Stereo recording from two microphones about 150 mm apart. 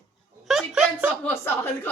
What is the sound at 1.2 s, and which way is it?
Speech, 15° left (ahead or behind).